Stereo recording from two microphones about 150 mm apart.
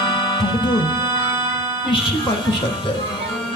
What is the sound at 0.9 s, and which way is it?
Music, 20° right (ahead or behind).